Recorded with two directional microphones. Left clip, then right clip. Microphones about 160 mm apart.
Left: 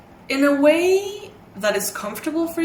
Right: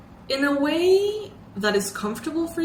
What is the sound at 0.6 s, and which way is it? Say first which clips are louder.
A woman's voice: left 2 dB; 30° left (ahead or behind).